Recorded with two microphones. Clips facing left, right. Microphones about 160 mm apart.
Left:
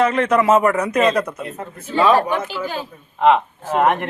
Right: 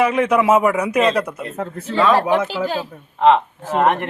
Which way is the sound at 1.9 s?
10° left (ahead or behind).